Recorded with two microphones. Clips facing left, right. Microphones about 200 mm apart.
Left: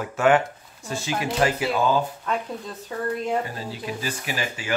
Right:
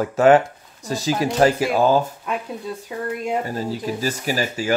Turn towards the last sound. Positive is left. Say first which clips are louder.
# right 7 dB
turn(degrees=-40)  # may be behind; listen again after turning